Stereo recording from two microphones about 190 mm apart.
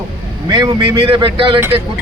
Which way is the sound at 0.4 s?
20° right (ahead or behind).